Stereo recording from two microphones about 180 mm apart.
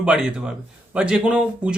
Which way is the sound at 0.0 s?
5° right (ahead or behind).